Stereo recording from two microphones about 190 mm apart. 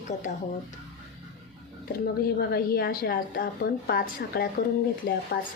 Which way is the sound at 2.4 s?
55° left (ahead or behind).